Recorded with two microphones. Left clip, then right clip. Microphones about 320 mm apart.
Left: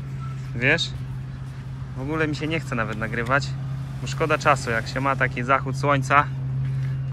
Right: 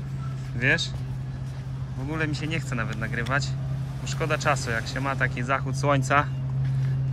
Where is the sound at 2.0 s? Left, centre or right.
Centre.